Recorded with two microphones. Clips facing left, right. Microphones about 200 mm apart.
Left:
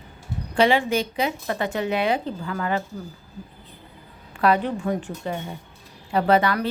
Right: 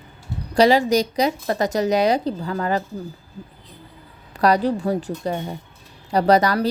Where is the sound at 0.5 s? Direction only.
40° right (ahead or behind).